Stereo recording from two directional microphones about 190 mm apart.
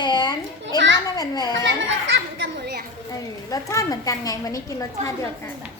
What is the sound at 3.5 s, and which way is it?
A woman's voice, 15° left (ahead or behind).